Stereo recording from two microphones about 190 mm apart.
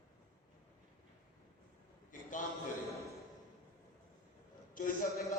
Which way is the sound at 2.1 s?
45° left (ahead or behind).